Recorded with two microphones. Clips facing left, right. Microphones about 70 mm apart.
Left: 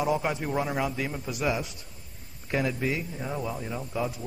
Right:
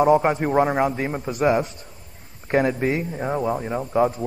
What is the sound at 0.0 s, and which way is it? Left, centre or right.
A man's voice, right.